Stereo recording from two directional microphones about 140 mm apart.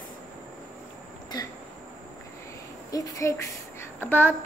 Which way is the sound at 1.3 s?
30° left (ahead or behind).